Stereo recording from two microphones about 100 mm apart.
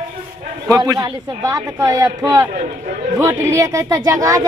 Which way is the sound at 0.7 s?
35° right (ahead or behind).